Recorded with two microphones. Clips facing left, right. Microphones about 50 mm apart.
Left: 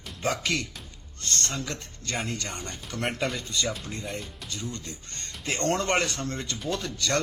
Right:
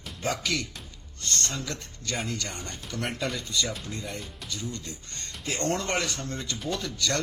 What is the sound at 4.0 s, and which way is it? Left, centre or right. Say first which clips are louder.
A man's voice: left 1 dB; left.